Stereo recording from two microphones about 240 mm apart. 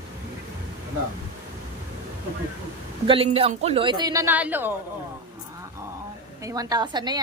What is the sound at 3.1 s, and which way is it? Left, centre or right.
Speech, right.